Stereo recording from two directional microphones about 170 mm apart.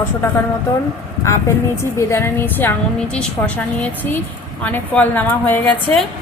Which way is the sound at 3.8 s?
10° left (ahead or behind).